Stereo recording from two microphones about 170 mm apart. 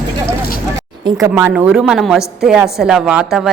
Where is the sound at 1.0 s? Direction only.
15° right (ahead or behind).